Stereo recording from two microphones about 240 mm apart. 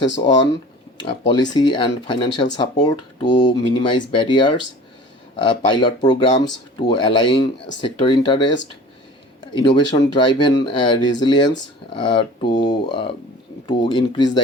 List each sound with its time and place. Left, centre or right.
1.3 s speech: centre